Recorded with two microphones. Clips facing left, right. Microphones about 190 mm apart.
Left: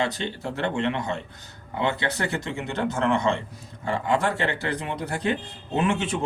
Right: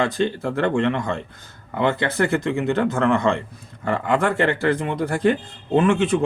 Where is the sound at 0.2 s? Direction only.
50° right (ahead or behind).